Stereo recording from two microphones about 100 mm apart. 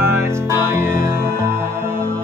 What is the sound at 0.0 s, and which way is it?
Music, 25° right (ahead or behind).